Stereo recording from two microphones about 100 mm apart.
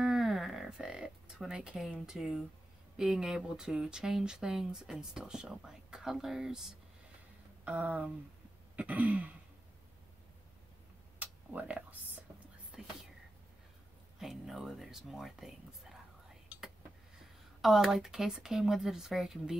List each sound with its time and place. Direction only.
0.0 s a sound: centre (ahead or behind)
2.0 s speech: centre (ahead or behind)
7.6 s throat clearing: 15° right (ahead or behind)
11.5 s speech: 15° right (ahead or behind)
12.7 s whispering: 5° right (ahead or behind)
14.2 s speech: 5° right (ahead or behind)
17.6 s speech: centre (ahead or behind)